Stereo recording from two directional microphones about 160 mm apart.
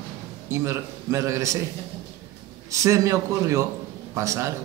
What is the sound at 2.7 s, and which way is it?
A man's voice, 20° right (ahead or behind).